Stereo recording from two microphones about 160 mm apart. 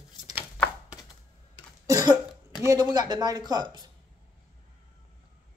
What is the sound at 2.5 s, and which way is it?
Speech, 25° right (ahead or behind).